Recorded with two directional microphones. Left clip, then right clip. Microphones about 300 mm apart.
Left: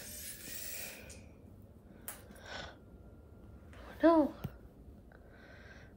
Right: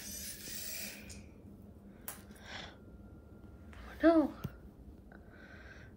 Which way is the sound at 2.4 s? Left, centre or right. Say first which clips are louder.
Left 1 dB; centre.